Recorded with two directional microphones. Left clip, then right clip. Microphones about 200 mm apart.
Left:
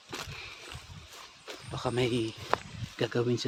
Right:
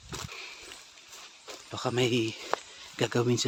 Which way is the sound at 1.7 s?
15° right (ahead or behind).